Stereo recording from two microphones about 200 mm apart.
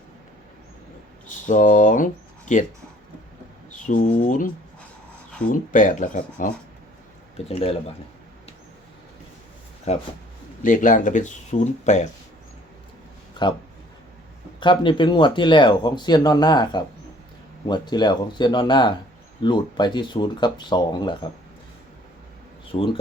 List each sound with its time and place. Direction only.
1.5 s speech: 40° left (ahead or behind)
3.8 s speech: 40° left (ahead or behind)
7.3 s speech: 30° left (ahead or behind)
9.9 s speech: 35° left (ahead or behind)
14.6 s speech: 25° left (ahead or behind)
22.7 s speech: 25° left (ahead or behind)